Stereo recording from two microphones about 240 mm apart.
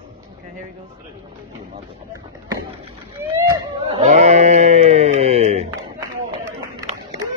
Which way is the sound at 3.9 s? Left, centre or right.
Right.